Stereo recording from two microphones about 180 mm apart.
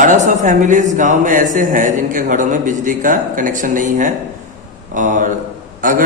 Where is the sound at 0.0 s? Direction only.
45° right (ahead or behind).